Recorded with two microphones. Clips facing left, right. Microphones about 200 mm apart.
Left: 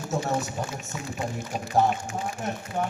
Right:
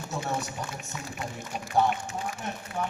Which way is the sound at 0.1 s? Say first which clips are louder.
Left 5 dB; 45° left (ahead or behind).